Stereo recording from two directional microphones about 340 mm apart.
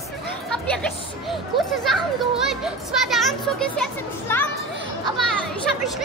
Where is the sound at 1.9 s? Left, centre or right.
Centre.